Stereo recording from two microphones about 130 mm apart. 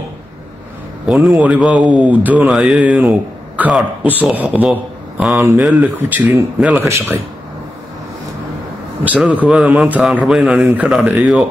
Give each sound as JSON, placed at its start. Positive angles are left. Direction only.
{"t": 1.0, "sound": "a man's voice", "side_deg": 0}
{"t": 6.0, "sound": "a man's voice", "side_deg": -15}
{"t": 9.0, "sound": "speech", "side_deg": -10}